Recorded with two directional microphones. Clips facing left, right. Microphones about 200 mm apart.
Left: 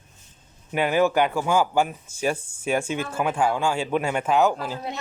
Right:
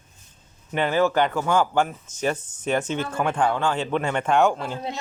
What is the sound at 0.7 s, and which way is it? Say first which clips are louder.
Speech: even; 10° left (ahead or behind).